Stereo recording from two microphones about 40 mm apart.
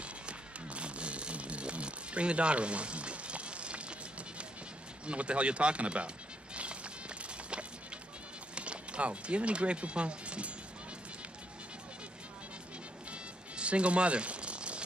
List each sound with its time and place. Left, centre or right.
0.0 s music: right
5.0 s a sound: right
8.5 s speech: right
13.1 s music: right